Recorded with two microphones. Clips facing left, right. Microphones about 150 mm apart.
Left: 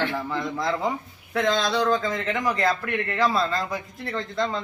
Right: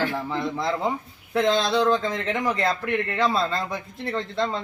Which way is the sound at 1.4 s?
30° right (ahead or behind).